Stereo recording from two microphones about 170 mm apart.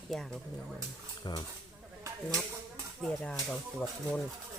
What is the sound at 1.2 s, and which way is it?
Speech, 25° left (ahead or behind).